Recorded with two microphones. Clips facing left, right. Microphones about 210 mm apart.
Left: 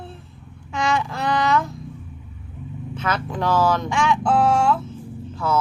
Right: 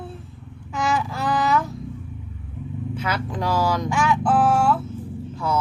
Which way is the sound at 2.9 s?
10° right (ahead or behind).